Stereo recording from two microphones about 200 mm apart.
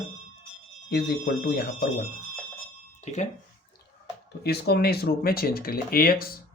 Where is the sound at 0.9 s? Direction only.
50° left (ahead or behind).